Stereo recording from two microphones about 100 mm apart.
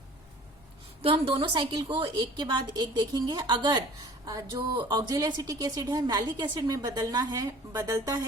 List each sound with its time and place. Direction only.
1.0 s a woman's voice: 65° right (ahead or behind); by 8.3 s 35° right (ahead or behind)